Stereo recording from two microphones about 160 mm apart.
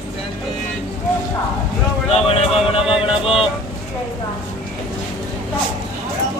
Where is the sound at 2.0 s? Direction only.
40° left (ahead or behind).